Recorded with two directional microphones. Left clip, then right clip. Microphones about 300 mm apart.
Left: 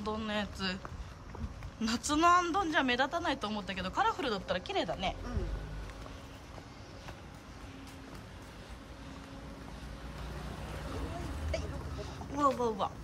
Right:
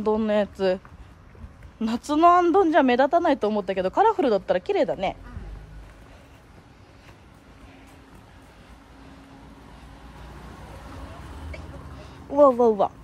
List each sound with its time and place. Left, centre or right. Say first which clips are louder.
0.0 s speech: right 14 dB; centre
1.8 s a woman's voice: right 9 dB; centre
12.0 s a sound: right 14 dB; centre